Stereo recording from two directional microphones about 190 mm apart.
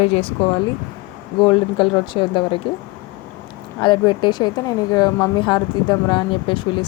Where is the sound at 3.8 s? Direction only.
25° left (ahead or behind).